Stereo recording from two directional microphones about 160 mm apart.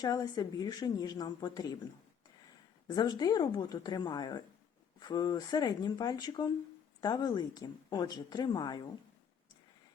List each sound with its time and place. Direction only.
0.0 s a woman's voice: 25° left (ahead or behind)
2.8 s a woman's voice: 25° left (ahead or behind)